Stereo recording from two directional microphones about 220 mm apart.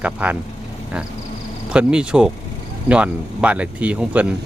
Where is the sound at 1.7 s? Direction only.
5° right (ahead or behind).